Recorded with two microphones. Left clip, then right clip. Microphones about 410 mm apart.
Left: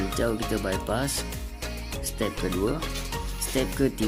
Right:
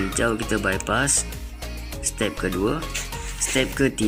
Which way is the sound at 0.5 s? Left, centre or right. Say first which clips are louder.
Right 5 dB; left.